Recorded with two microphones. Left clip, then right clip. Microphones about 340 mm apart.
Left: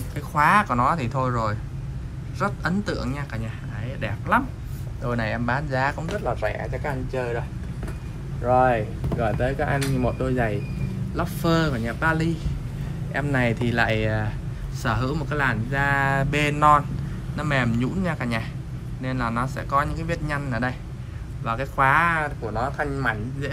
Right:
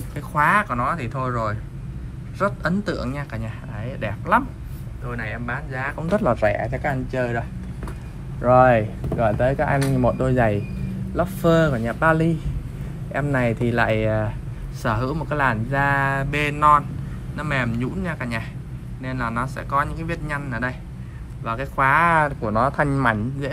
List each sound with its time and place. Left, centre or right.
0.1 s speech: centre
6.8 s speech: right
8.5 s speech: centre
11.1 s speech: centre